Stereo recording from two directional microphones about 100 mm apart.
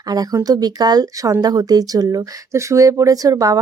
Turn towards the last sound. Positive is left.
turn(degrees=-35)  # may be behind; listen again after turning